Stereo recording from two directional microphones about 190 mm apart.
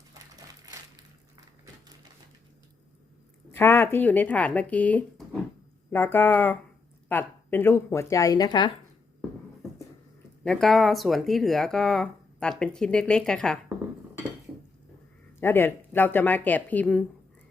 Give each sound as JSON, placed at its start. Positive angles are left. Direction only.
{"t": 0.1, "sound": "a sound", "side_deg": -20}
{"t": 3.5, "sound": "a woman's voice", "side_deg": 10}
{"t": 10.4, "sound": "speech", "side_deg": 0}
{"t": 15.4, "sound": "a woman's voice", "side_deg": 10}